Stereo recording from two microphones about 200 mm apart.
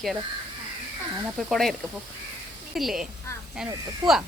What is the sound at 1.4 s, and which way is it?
Speech, centre (ahead or behind).